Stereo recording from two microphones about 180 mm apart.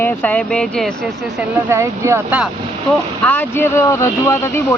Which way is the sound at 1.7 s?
15° right (ahead or behind).